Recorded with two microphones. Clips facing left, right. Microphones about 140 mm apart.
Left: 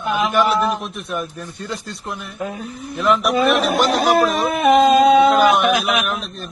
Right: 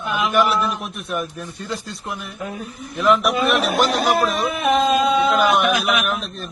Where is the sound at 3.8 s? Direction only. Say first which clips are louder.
Left 2 dB; 40° left (ahead or behind).